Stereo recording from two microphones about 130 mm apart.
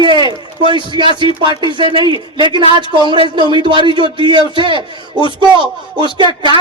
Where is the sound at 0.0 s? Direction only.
35° right (ahead or behind).